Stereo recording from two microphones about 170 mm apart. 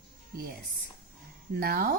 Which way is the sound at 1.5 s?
65° right (ahead or behind).